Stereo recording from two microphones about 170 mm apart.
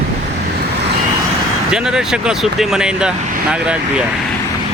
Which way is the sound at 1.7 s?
5° right (ahead or behind).